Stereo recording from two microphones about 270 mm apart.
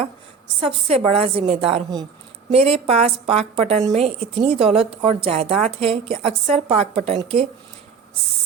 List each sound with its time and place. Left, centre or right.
0.6 s a woman's voice: right